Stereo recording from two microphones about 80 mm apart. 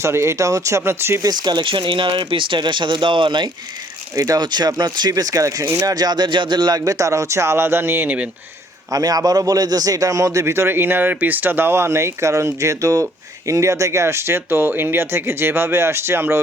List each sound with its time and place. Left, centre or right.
0.0 s speech: right
1.2 s speech: right
4.1 s speech: right
4.4 s speech: right
8.9 s speech: right
10.4 s speech: right